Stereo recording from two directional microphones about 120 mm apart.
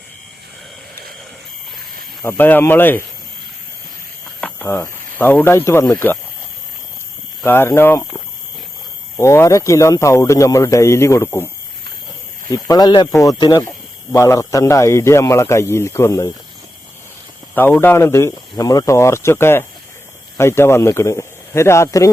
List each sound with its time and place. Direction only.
2.2 s speech: 15° left (ahead or behind)
4.4 s speech: 15° left (ahead or behind)
7.4 s a man's voice: 20° left (ahead or behind)
12.5 s a man's voice: 30° left (ahead or behind)
17.5 s a man's voice: 15° left (ahead or behind)